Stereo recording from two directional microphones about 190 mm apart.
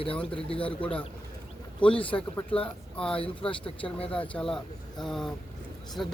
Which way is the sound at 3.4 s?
30° left (ahead or behind).